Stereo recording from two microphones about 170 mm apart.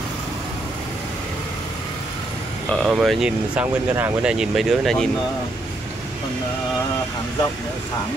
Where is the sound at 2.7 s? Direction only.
Centre (ahead or behind).